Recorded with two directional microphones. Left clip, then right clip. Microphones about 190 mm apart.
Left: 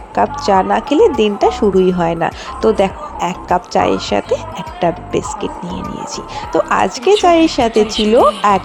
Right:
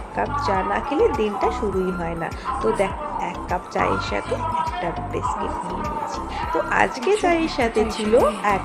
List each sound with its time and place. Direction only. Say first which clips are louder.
0.2 s speech: left 9 dB; 45° left (ahead or behind)
6.5 s speech: left 7 dB; 40° left (ahead or behind)